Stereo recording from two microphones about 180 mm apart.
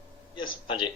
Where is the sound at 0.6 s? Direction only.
30° left (ahead or behind).